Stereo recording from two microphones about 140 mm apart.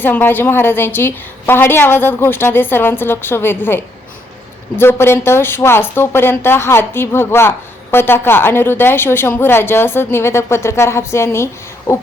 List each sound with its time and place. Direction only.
0.0 s speech: 15° left (ahead or behind)
4.8 s speech: 15° left (ahead or behind)
11.9 s heart murmur: 20° left (ahead or behind)